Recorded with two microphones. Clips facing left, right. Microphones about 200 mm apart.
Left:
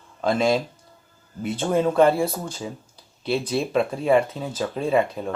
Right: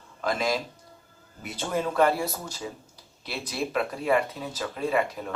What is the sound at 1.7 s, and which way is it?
Speech, 30° left (ahead or behind).